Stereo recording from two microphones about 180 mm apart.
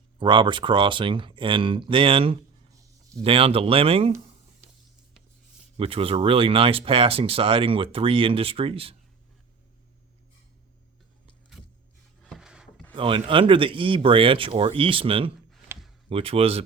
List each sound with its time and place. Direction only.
0.2 s speech: 25° right (ahead or behind)
5.7 s speech: 30° right (ahead or behind)
12.2 s a sound: centre (ahead or behind)
12.9 s speech: 30° right (ahead or behind)
15.7 s a sound: 15° right (ahead or behind)
16.0 s speech: 30° right (ahead or behind)